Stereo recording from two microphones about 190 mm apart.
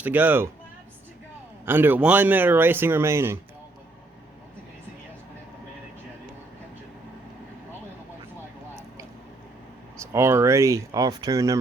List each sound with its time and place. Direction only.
0.0 s speech: 10° right (ahead or behind)
1.6 s speech: 10° right (ahead or behind)
10.0 s speech: 15° right (ahead or behind)